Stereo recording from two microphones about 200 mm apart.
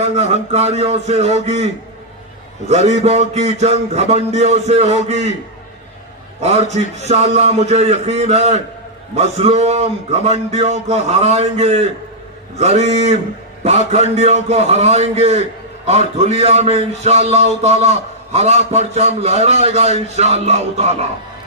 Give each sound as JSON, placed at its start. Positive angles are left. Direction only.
{"t": 0.0, "sound": "a man's voice", "side_deg": -35}
{"t": 2.6, "sound": "a man's voice", "side_deg": -35}
{"t": 6.4, "sound": "a man's voice", "side_deg": -35}